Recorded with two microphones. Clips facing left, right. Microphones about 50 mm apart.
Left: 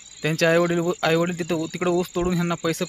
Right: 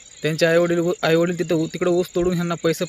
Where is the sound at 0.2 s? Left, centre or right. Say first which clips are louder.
Right 2 dB; left.